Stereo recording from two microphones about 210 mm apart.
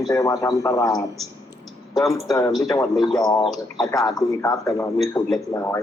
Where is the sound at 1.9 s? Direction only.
Centre (ahead or behind).